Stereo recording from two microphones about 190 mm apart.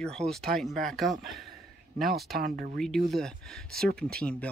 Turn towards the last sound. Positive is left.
turn(degrees=5)  # may be behind; listen again after turning